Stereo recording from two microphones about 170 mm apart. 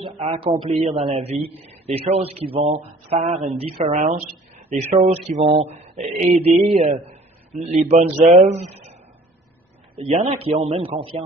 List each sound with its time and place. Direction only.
0.2 s speech: 35° right (ahead or behind)
9.9 s speech: 40° right (ahead or behind)